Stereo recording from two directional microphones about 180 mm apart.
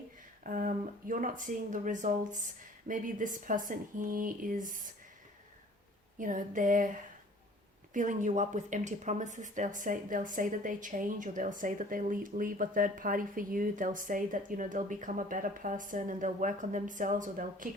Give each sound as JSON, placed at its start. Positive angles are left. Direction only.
{"t": 0.4, "sound": "speech", "side_deg": -50}
{"t": 6.1, "sound": "speech", "side_deg": -45}